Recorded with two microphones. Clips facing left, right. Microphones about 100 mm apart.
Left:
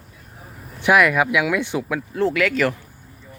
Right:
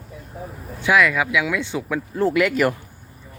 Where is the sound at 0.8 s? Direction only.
20° left (ahead or behind).